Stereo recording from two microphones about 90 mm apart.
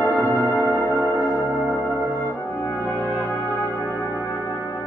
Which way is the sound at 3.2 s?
20° left (ahead or behind).